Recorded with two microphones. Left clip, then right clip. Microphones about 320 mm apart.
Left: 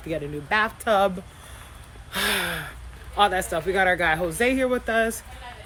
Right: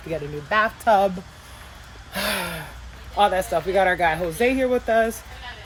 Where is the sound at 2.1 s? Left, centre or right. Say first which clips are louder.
Left 1 dB; centre.